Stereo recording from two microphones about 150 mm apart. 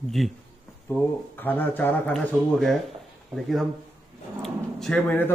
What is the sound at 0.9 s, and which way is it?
Speech, 10° left (ahead or behind).